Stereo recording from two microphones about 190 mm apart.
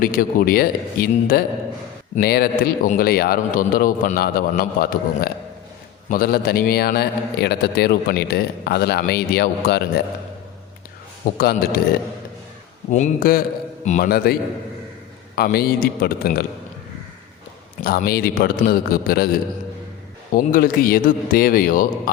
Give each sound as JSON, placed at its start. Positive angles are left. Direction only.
{"t": 0.0, "sound": "a man's voice", "side_deg": 50}
{"t": 11.3, "sound": "a man's voice", "side_deg": 55}
{"t": 12.9, "sound": "a man's voice", "side_deg": 45}
{"t": 15.4, "sound": "a man's voice", "side_deg": 55}
{"t": 17.8, "sound": "a man's voice", "side_deg": 55}
{"t": 20.3, "sound": "a man's voice", "side_deg": 50}